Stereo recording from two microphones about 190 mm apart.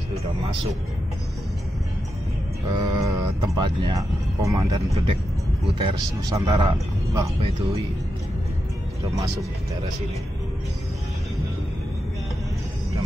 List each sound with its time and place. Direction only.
2.7 s a man's voice: 20° right (ahead or behind)